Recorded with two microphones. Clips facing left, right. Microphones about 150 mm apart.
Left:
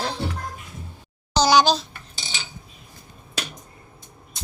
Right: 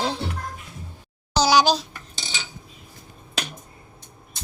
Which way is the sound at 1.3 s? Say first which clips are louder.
Left 1 dB; 5° right (ahead or behind).